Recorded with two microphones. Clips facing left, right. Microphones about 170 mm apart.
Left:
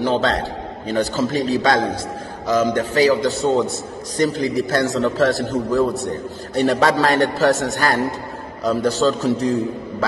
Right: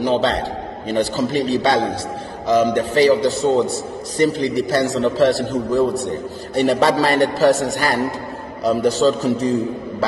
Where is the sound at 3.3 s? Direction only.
35° right (ahead or behind).